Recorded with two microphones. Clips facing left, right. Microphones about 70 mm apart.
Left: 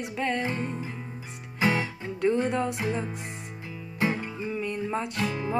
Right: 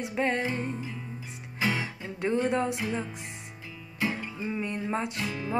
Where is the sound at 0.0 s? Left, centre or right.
Right.